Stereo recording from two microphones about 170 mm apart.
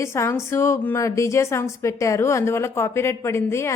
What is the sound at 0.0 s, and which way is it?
A woman's voice, 15° left (ahead or behind).